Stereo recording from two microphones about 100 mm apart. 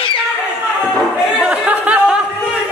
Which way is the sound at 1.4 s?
10° right (ahead or behind).